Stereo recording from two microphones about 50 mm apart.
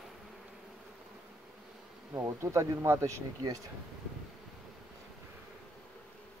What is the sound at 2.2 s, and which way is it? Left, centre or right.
Speech, right.